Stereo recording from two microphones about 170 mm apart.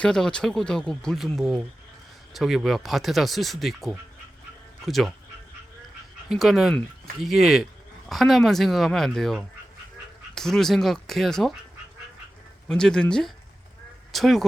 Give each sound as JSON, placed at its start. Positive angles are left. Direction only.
{"t": 0.0, "sound": "speech", "side_deg": 5}
{"t": 6.2, "sound": "speech", "side_deg": 0}
{"t": 12.6, "sound": "speech", "side_deg": 5}